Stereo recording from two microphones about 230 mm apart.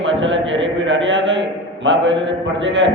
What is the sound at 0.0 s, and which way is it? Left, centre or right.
A man's voice, right.